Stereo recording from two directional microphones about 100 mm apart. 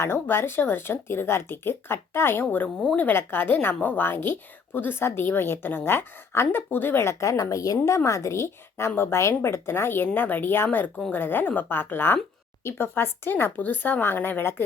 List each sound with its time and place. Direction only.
0.0 s a woman's voice: 25° left (ahead or behind)